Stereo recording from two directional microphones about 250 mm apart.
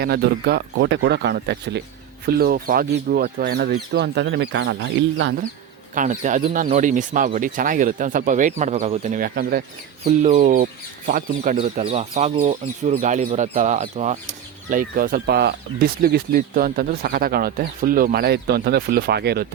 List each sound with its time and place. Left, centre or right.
0.0 s speech: right
5.9 s speech: right